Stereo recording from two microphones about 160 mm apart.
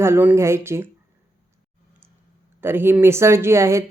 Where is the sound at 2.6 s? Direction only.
15° right (ahead or behind).